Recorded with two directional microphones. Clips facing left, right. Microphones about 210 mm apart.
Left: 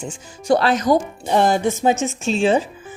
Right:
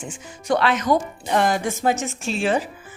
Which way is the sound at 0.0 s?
30° left (ahead or behind).